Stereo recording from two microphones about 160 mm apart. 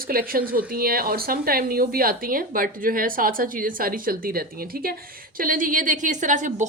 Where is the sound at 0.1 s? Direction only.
65° right (ahead or behind).